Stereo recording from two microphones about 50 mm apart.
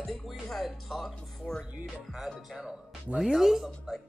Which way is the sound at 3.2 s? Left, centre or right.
Centre.